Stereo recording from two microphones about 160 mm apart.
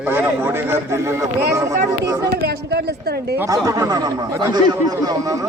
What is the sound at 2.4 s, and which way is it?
A woman's voice, 80° right.